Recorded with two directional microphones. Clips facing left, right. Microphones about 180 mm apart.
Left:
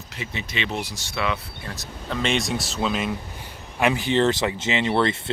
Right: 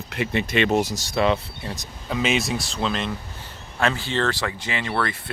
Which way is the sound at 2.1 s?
5° right (ahead or behind).